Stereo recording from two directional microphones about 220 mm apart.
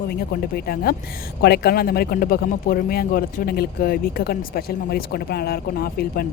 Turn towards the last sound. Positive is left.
turn(degrees=45)  # may be behind; listen again after turning